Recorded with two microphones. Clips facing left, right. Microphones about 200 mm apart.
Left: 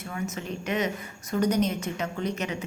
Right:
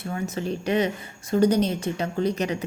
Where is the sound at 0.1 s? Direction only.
35° right (ahead or behind).